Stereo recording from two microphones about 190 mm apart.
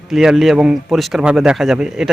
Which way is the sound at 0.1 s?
Centre (ahead or behind).